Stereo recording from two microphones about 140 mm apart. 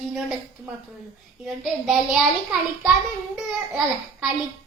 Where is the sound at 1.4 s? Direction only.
Centre (ahead or behind).